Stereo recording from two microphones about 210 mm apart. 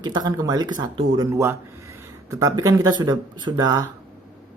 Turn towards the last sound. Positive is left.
turn(degrees=-15)  # may be behind; listen again after turning